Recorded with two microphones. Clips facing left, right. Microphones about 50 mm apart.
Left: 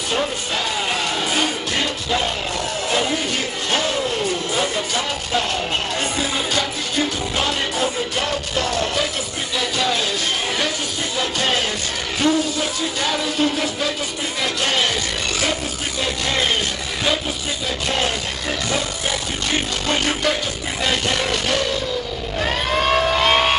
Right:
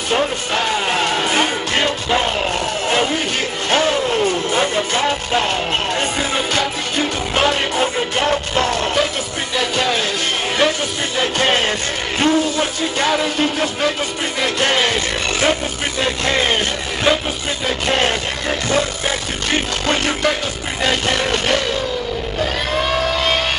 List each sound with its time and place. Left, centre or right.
0.6 s music: right
3.7 s music: right
11.1 s music: right
17.8 s music: right
20.8 s music: right
22.4 s a sound: centre